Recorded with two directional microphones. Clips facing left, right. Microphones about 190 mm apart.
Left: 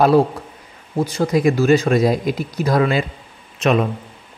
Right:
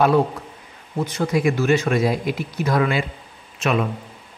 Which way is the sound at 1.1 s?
35° left (ahead or behind).